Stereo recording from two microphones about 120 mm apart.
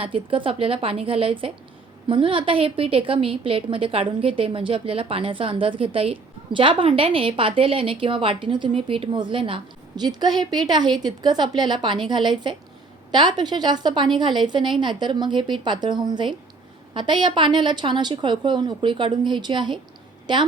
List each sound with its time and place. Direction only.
0.0 s a woman's voice: 45° right (ahead or behind)
10.0 s a woman's voice: 35° right (ahead or behind)